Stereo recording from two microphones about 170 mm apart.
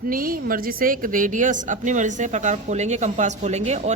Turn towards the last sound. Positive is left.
turn(degrees=-40)  # may be behind; listen again after turning